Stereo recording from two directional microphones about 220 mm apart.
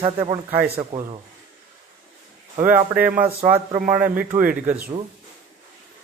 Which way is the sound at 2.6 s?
40° right (ahead or behind).